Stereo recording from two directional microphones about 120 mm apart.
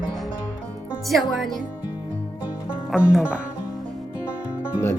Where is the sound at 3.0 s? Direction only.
5° right (ahead or behind).